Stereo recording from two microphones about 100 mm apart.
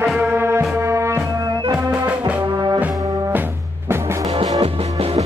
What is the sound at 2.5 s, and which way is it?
Brass instrument, 45° right (ahead or behind).